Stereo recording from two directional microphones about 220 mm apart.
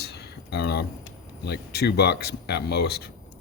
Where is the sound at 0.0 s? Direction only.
45° left (ahead or behind).